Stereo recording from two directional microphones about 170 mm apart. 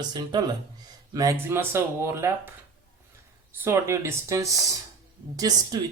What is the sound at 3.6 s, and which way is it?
Speech, 15° right (ahead or behind).